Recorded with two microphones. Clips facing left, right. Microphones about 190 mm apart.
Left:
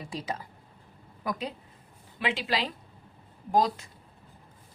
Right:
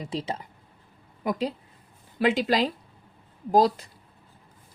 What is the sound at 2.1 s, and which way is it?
A woman's voice, 45° right (ahead or behind).